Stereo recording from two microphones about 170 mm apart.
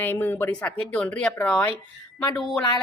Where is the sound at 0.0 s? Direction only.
10° left (ahead or behind).